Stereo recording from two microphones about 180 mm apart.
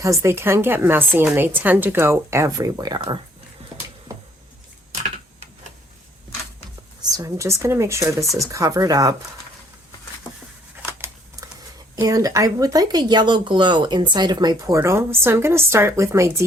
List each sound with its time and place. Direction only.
0.0 s a woman's voice: 15° right (ahead or behind)
7.1 s a woman's voice: 15° right (ahead or behind)
10.9 s a sound: 15° right (ahead or behind)
11.9 s speech: 20° right (ahead or behind)